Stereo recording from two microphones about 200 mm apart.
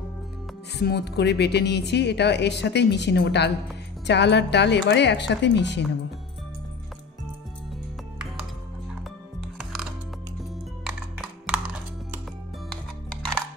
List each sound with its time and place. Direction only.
0.7 s speech: 55° left (ahead or behind)
9.6 s music: 5° right (ahead or behind)
11.1 s music: 5° right (ahead or behind)